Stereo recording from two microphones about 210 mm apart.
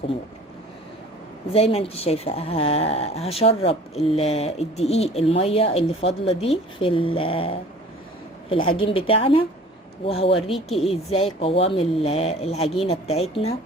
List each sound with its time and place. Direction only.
1.5 s speech: 30° left (ahead or behind)
8.7 s speech: 25° left (ahead or behind)
10.5 s speech: centre (ahead or behind)
11.3 s speech: 25° left (ahead or behind)